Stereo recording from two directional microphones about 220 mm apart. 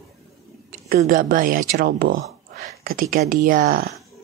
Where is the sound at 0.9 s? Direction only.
40° right (ahead or behind).